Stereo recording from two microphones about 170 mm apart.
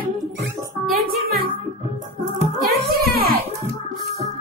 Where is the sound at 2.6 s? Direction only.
65° right (ahead or behind).